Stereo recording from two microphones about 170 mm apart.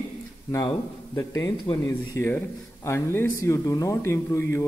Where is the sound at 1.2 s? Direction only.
20° left (ahead or behind).